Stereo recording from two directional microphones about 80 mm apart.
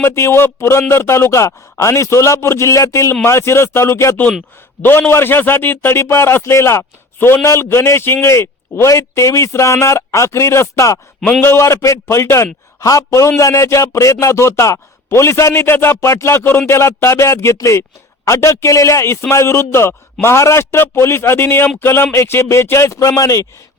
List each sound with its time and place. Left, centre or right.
0.0 s speech: left
4.8 s a man's voice: left